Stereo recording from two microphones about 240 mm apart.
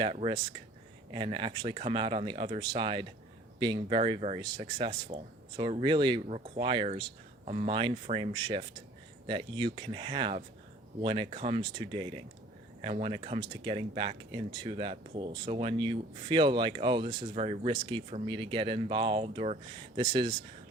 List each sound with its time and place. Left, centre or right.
0.0 s speech: right